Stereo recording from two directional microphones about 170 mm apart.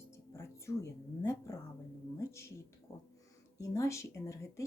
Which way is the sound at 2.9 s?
15° left (ahead or behind).